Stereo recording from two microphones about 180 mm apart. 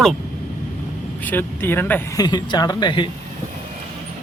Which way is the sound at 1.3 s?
10° left (ahead or behind).